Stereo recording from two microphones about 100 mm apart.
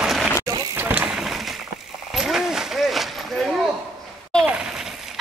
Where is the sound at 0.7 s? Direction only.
15° right (ahead or behind).